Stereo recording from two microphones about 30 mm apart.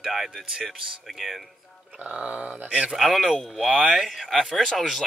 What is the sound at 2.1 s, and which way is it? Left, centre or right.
Snicker, right.